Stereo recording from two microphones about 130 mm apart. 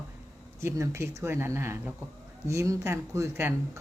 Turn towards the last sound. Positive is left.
turn(degrees=-20)  # may be behind; listen again after turning